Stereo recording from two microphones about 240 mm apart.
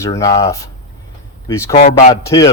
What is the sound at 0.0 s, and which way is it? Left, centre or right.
Speech, centre.